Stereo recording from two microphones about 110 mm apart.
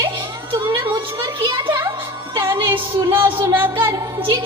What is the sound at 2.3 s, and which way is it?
Music, 45° right (ahead or behind).